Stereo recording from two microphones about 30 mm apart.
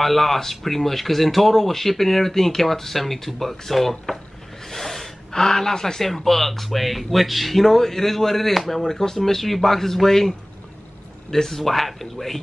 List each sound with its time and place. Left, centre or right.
0.0 s speech: centre
4.6 s snort: centre
5.3 s speech: centre
6.0 s speech: centre